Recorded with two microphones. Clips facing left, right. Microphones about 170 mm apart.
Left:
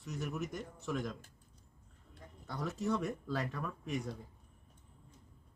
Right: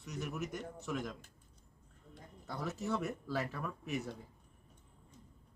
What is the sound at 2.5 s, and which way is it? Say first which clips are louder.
Speech: left 2 dB; 5° right (ahead or behind).